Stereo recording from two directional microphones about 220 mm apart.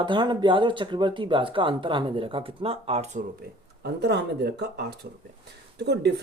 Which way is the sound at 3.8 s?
50° right (ahead or behind).